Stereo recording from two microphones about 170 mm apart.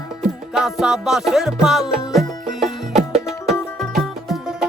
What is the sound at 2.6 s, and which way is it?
Music, 45° right (ahead or behind).